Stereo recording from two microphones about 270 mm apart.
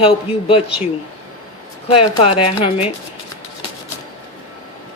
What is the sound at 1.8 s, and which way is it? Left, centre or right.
Speech, left.